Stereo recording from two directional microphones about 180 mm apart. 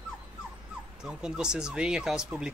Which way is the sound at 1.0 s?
5° right (ahead or behind).